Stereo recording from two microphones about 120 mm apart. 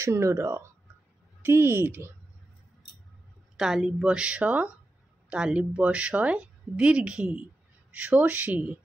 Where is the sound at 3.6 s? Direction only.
5° right (ahead or behind).